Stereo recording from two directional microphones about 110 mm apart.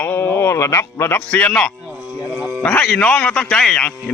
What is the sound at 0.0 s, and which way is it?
Speech, 20° left (ahead or behind).